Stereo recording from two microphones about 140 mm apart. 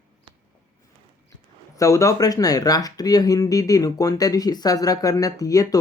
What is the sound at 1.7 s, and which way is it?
Speech, 25° left (ahead or behind).